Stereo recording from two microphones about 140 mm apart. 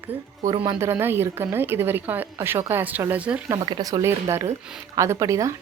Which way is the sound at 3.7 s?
30° right (ahead or behind).